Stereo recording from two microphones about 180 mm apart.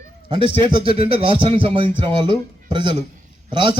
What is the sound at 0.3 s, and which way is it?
A man's voice, 25° right (ahead or behind).